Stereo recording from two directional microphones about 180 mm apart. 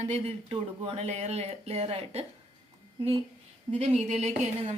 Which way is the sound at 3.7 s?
35° right (ahead or behind).